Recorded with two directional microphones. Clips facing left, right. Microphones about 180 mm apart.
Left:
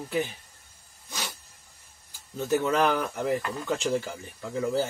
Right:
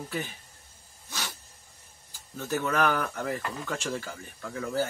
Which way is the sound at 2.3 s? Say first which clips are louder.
Left 4 dB; 20° left (ahead or behind).